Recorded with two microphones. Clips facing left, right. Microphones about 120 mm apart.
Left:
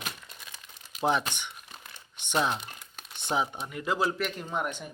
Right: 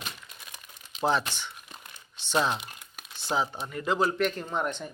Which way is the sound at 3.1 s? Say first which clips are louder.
Even; 20° left (ahead or behind).